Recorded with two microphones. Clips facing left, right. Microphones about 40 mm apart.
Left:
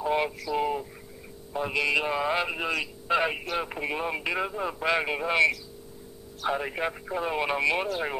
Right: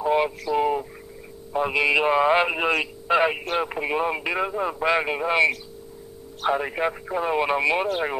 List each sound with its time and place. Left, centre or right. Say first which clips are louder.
0.0 s a sound: right 5 dB; centre
0.5 s a man's voice: right 5 dB; centre; by 2.9 s right
3.1 s speech: right 5 dB; centre
6.5 s speech: right 5 dB; centre